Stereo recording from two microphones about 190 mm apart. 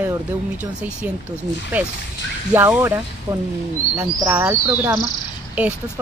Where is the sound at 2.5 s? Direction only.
10° right (ahead or behind).